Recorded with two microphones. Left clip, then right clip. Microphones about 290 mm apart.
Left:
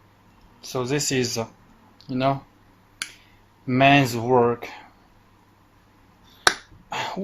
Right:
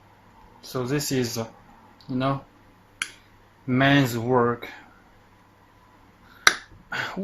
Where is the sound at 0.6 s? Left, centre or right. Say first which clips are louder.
Left 2 dB; left.